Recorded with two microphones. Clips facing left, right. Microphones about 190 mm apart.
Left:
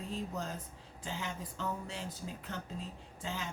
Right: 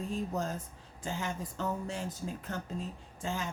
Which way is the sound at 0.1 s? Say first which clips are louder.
Right 3 dB; 45° right (ahead or behind).